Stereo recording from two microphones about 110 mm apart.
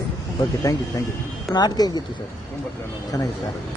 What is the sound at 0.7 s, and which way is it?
Speech, 30° left (ahead or behind).